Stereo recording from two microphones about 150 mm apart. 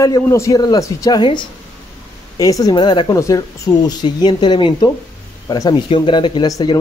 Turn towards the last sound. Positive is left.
turn(degrees=35)  # may be behind; listen again after turning